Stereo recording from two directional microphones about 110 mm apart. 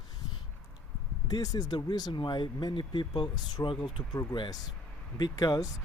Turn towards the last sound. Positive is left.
turn(degrees=35)  # may be behind; listen again after turning